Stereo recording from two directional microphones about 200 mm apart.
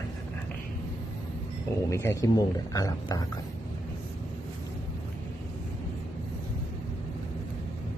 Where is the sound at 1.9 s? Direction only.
15° left (ahead or behind).